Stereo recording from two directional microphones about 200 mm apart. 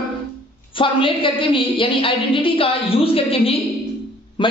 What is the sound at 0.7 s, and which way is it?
A woman's voice, 25° left (ahead or behind).